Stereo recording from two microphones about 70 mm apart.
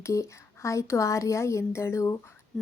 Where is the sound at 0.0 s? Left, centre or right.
Left.